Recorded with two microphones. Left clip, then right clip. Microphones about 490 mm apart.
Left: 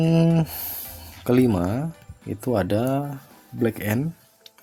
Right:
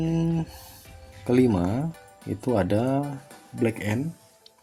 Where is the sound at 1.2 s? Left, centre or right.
Left.